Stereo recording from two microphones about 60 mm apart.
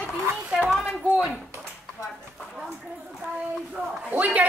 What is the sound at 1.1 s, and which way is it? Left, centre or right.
Speech, centre.